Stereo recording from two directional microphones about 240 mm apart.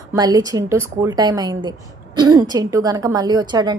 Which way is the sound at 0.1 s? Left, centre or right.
Centre.